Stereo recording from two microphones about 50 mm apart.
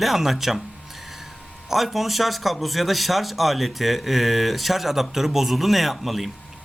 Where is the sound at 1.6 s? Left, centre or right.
Centre.